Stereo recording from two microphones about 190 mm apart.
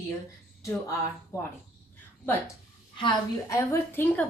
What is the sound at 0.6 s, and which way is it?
Speech, 15° left (ahead or behind).